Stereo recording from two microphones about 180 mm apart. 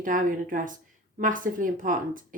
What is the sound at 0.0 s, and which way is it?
A woman's voice, 50° right (ahead or behind).